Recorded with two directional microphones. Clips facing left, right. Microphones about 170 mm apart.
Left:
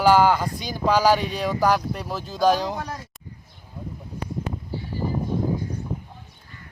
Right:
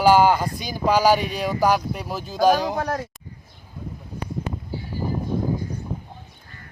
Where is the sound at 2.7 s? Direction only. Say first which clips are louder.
Right 6 dB; 70° right (ahead or behind).